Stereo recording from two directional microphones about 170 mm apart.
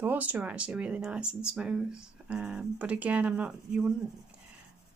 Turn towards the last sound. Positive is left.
turn(degrees=-5)  # may be behind; listen again after turning